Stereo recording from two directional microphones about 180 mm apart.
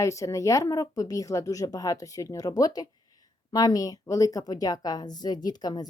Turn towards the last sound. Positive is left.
turn(degrees=20)  # may be behind; listen again after turning